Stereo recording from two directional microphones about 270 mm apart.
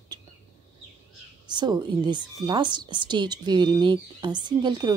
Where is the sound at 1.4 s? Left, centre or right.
Centre.